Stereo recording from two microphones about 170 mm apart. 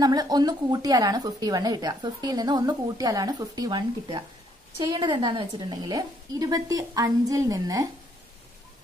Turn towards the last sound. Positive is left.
turn(degrees=-20)  # may be behind; listen again after turning